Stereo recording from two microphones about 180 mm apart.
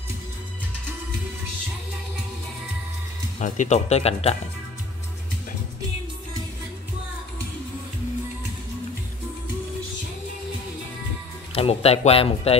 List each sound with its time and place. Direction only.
3.3 s speech: 45° left (ahead or behind)
11.5 s speech: 35° left (ahead or behind)